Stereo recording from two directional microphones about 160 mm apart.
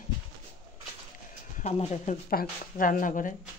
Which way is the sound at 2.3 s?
60° left (ahead or behind).